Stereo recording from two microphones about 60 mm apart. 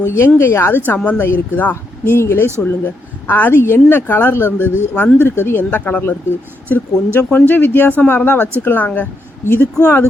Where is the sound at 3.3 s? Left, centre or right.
Left.